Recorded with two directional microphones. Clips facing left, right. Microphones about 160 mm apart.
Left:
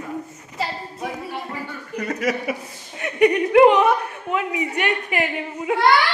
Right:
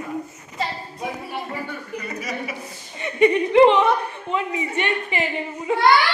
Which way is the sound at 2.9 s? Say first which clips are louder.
Even; 5° left (ahead or behind).